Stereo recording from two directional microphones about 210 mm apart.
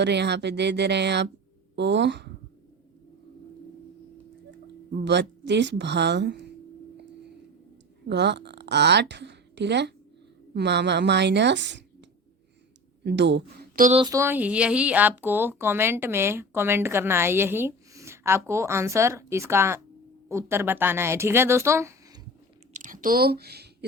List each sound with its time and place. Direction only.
0.0 s a woman's voice: 55° right (ahead or behind)
5.0 s a woman's voice: 55° right (ahead or behind)
8.0 s a woman's voice: 55° right (ahead or behind)
13.1 s speech: 55° right (ahead or behind)
13.9 s speech: 20° right (ahead or behind)
22.7 s speech: 40° right (ahead or behind)